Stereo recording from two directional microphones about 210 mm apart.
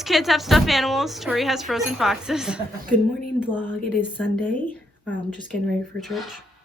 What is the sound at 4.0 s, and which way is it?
Speech, 10° left (ahead or behind).